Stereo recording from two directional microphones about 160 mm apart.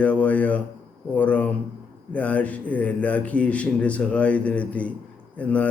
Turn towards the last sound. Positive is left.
turn(degrees=10)  # may be behind; listen again after turning